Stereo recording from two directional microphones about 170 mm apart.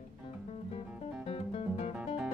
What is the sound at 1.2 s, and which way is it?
Music, 40° left (ahead or behind).